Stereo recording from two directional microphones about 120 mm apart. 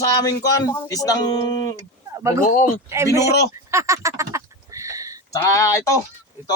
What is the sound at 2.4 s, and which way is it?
Speech, 90° left.